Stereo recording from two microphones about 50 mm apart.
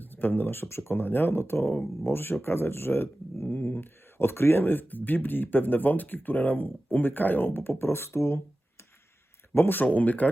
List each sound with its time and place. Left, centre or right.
0.0 s speech: left
1.0 s speech: left
3.4 s speech: left
9.6 s speech: left